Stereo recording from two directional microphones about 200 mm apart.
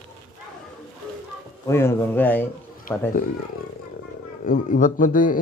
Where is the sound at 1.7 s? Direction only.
10° left (ahead or behind).